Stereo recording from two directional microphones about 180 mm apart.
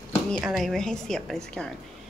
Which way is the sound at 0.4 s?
Centre (ahead or behind).